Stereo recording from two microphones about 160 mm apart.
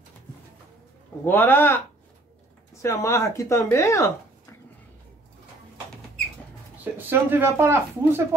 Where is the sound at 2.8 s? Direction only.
15° left (ahead or behind).